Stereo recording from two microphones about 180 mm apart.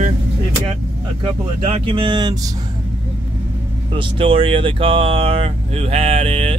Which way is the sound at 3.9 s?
30° right (ahead or behind).